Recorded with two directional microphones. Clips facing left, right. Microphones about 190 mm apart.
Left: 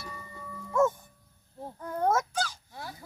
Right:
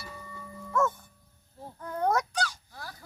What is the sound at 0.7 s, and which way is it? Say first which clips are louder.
Livestock: left 3 dB; 20° left (ahead or behind).